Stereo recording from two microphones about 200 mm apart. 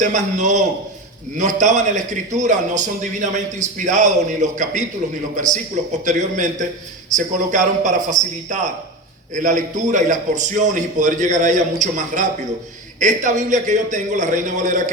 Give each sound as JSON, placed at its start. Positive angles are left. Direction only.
{"t": 0.0, "sound": "a man's voice", "side_deg": -40}